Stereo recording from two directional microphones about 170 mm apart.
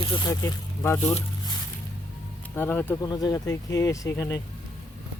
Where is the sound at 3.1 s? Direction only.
25° left (ahead or behind).